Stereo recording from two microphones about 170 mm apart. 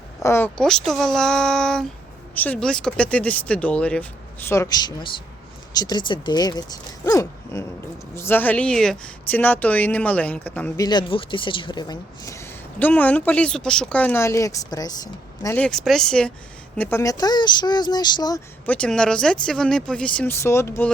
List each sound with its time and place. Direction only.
0.2 s speech: 15° left (ahead or behind)
10.8 s speech: 25° left (ahead or behind)
15.5 s speech: 5° left (ahead or behind); by 18.4 s 25° left (ahead or behind)
18.6 s speech: 5° left (ahead or behind)